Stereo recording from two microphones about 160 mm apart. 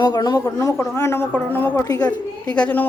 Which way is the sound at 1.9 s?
25° left (ahead or behind).